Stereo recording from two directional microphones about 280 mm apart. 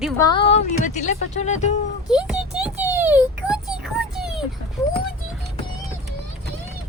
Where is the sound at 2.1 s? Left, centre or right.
Centre.